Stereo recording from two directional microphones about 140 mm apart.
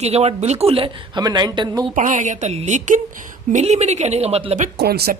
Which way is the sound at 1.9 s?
65° right (ahead or behind).